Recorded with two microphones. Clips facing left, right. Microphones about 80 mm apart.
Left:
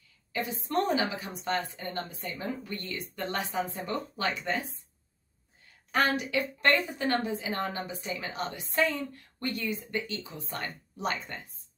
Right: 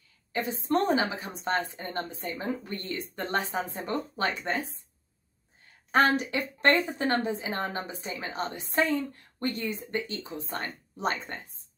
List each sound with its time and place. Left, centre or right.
0.3 s a woman's voice: right
5.9 s a woman's voice: right